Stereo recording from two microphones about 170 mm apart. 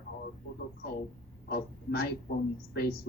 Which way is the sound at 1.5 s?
65° left (ahead or behind).